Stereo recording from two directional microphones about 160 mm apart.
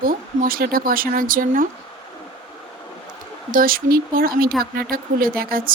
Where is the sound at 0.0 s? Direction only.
60° right (ahead or behind).